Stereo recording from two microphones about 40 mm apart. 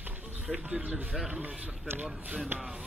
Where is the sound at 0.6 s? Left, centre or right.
Right.